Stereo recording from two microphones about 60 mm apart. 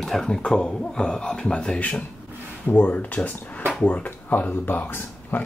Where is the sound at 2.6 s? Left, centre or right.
Left.